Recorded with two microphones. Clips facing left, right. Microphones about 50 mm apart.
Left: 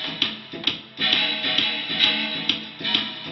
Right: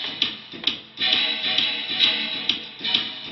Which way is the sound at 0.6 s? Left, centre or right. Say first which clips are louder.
Left 1 dB; centre.